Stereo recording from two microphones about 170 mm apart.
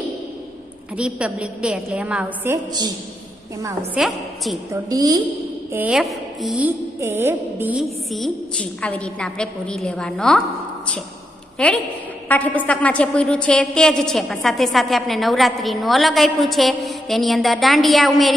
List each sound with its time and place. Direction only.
0.9 s a woman's voice: 5° right (ahead or behind)
3.9 s a woman's voice: centre (ahead or behind)
4.8 s a woman's voice: 20° right (ahead or behind)
5.7 s a woman's voice: 10° right (ahead or behind)
7.0 s a woman's voice: 15° right (ahead or behind)
8.1 s a woman's voice: centre (ahead or behind)
11.5 s a woman's voice: 5° left (ahead or behind)